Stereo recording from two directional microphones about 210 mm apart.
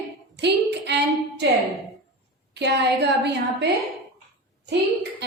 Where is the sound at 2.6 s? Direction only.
55° right (ahead or behind).